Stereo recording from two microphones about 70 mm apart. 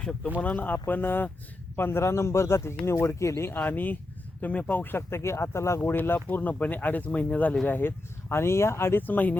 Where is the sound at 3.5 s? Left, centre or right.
Left.